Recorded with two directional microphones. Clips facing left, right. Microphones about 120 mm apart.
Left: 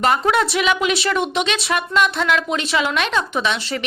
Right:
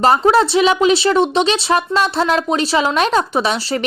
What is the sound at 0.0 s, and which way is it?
Speech, 35° right (ahead or behind).